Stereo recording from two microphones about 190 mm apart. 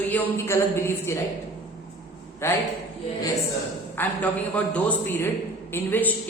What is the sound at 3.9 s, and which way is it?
A man's voice, 10° left (ahead or behind).